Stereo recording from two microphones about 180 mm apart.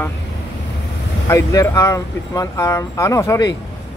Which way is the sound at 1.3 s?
15° left (ahead or behind).